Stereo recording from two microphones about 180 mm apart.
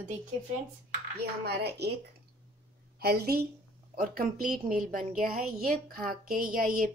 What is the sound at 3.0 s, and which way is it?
Speech, 60° right (ahead or behind).